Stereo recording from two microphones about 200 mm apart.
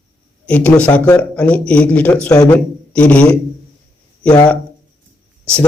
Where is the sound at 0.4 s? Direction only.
5° left (ahead or behind).